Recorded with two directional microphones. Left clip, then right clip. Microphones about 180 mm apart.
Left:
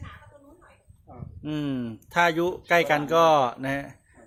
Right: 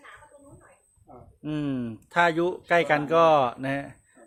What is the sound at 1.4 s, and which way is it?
A man's voice, 5° right (ahead or behind).